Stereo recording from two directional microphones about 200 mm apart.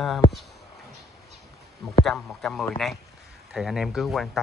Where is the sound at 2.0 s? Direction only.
Centre (ahead or behind).